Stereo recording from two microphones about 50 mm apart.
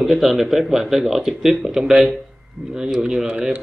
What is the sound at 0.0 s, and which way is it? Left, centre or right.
Speech, centre.